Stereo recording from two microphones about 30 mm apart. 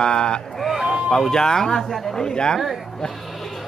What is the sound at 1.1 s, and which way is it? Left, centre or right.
Speech, centre.